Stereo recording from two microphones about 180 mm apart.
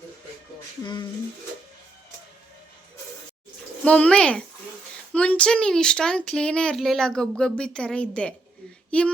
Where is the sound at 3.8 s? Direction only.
5° left (ahead or behind).